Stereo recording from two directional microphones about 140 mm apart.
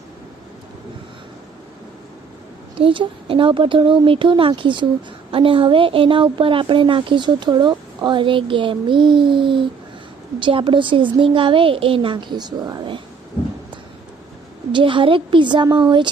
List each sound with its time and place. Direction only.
2.7 s a woman's voice: 40° right (ahead or behind)
14.7 s a woman's voice: 35° right (ahead or behind)